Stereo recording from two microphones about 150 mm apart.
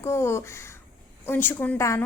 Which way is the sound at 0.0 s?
20° left (ahead or behind).